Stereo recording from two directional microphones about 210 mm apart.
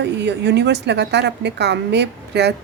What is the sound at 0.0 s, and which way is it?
A woman's voice, 55° right (ahead or behind).